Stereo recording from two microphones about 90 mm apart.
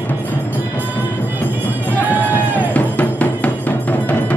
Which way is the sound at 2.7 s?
15° left (ahead or behind).